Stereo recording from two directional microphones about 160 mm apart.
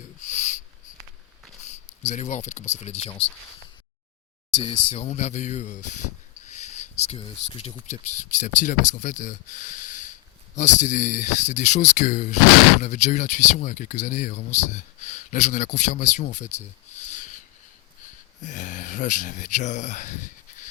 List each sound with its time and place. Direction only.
0.2 s wheeze: 50° left (ahead or behind)
2.0 s speech: 50° left (ahead or behind)
4.5 s speech: 30° left (ahead or behind); by 17.4 s 50° left (ahead or behind)
18.4 s speech: 55° left (ahead or behind)